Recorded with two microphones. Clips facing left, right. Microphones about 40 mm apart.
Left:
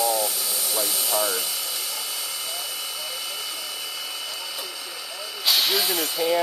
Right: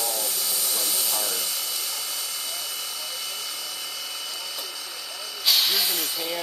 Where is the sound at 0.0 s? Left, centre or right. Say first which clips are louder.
Left 6 dB; centre.